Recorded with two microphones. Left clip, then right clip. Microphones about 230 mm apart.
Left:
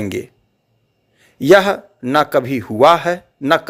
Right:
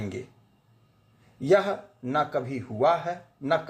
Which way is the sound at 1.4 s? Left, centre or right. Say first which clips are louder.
Left 12 dB; left.